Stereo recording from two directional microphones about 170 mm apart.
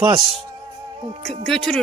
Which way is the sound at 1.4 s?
5° left (ahead or behind).